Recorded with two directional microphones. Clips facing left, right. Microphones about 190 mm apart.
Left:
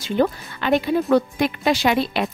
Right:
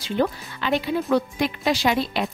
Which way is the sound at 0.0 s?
50° left (ahead or behind).